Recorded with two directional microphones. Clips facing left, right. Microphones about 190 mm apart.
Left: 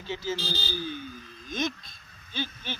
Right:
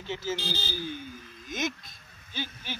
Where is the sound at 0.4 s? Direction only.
20° right (ahead or behind).